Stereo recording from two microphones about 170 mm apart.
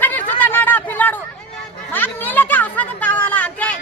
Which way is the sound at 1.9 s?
10° left (ahead or behind).